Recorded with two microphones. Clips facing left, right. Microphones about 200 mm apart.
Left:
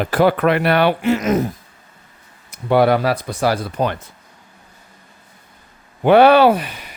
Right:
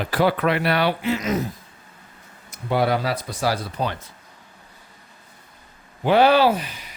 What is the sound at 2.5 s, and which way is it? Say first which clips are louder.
Speech: left 7 dB; 60° left (ahead or behind).